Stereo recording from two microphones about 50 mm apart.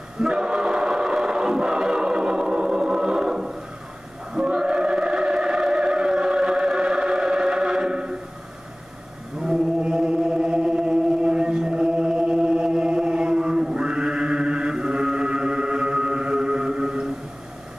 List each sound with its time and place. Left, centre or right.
0.2 s music: centre
4.3 s a sound: centre
9.4 s chant: centre